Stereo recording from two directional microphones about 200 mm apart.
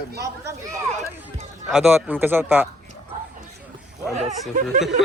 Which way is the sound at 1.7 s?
10° right (ahead or behind).